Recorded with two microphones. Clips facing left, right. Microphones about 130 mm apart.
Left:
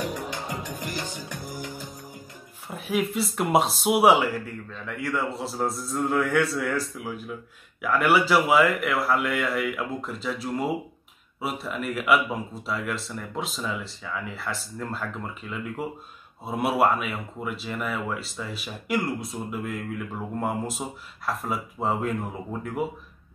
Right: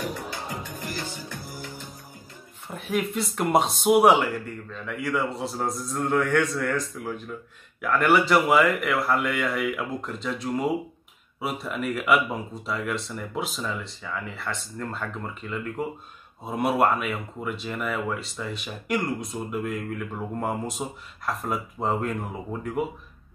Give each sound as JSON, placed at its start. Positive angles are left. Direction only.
{"t": 0.0, "sound": "music", "side_deg": 15}
{"t": 2.7, "sound": "speech", "side_deg": 0}